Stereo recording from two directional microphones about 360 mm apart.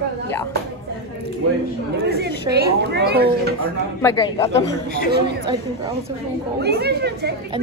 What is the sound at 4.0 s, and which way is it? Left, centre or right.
Speech, centre.